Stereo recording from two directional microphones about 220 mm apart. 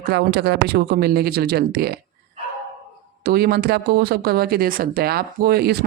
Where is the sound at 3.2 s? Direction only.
45° right (ahead or behind).